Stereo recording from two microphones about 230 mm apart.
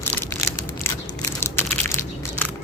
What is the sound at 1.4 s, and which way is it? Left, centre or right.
Crushing, centre.